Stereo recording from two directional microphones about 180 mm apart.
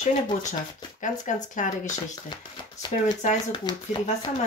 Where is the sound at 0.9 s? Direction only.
45° left (ahead or behind).